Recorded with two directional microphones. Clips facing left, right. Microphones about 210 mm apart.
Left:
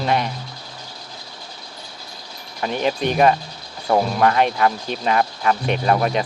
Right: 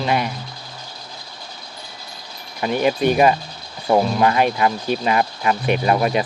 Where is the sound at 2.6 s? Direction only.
10° right (ahead or behind).